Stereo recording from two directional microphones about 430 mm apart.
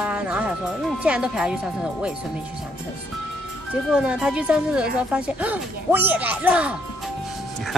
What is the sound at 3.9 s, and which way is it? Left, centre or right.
Speech, centre.